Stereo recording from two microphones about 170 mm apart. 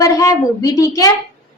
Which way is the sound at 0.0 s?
20° left (ahead or behind).